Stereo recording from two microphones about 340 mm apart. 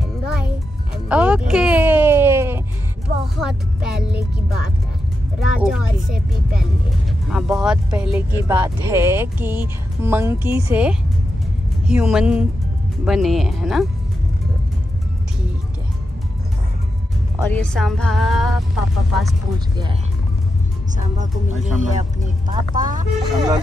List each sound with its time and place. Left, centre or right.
1.0 s music: centre
3.3 s speech: centre
17.5 s speech: centre
21.2 s speech: right
23.2 s speech: centre